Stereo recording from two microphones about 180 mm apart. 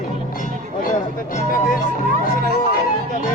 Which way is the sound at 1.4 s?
50° left (ahead or behind).